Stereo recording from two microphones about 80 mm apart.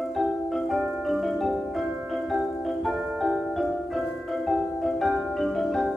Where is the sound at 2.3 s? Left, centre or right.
Centre.